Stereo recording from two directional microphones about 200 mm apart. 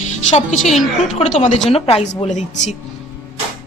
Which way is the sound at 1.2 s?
35° left (ahead or behind).